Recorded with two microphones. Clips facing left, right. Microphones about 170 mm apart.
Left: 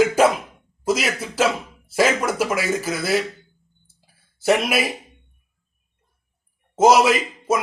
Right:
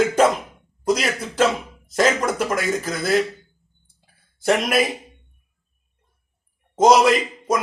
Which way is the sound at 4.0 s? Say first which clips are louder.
Even; 5° left (ahead or behind).